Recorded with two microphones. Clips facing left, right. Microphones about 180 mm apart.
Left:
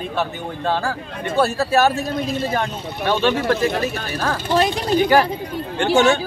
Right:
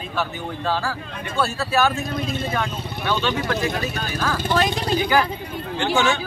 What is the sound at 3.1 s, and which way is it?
Speech, 50° left (ahead or behind).